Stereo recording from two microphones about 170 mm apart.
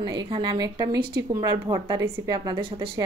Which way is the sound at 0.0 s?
25° right (ahead or behind).